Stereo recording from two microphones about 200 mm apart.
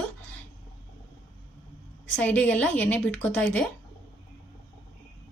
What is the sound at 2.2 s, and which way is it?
Speech, 10° left (ahead or behind).